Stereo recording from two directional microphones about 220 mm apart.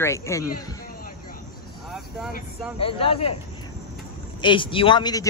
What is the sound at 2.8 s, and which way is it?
Speech, 25° left (ahead or behind).